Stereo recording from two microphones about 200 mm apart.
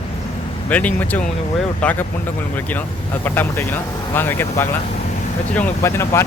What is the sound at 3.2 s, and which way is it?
Speech, 10° left (ahead or behind).